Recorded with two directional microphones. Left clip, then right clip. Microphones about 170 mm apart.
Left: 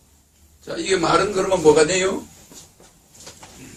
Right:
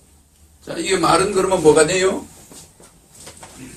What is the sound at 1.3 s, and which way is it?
Speech, centre (ahead or behind).